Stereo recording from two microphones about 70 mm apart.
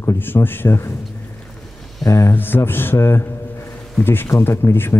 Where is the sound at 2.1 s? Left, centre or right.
Left.